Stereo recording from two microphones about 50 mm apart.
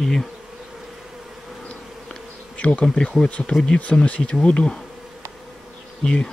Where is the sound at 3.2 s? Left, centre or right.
Left.